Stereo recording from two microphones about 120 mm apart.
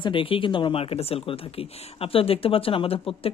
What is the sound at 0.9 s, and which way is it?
Speech, 55° left (ahead or behind).